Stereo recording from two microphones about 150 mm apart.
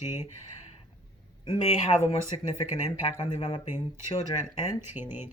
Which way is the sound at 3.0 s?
50° left (ahead or behind).